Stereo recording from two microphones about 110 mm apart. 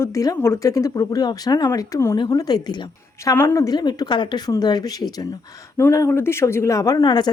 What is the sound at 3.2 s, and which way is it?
Speech, 25° left (ahead or behind).